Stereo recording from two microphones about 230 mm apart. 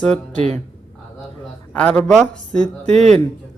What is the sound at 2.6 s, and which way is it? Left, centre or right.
Speech, right.